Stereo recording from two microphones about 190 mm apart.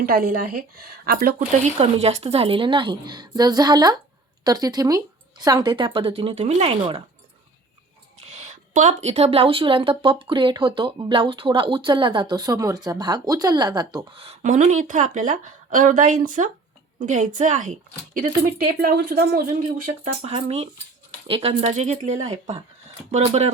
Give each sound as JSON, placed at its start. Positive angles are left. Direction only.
{"t": 0.0, "sound": "a woman's voice", "side_deg": -50}
{"t": 1.6, "sound": "a woman's voice", "side_deg": -35}
{"t": 8.2, "sound": "speech", "side_deg": -35}
{"t": 14.3, "sound": "a woman's voice", "side_deg": -40}
{"t": 18.8, "sound": "a woman's voice", "side_deg": -55}
{"t": 20.1, "sound": "a woman's voice", "side_deg": -30}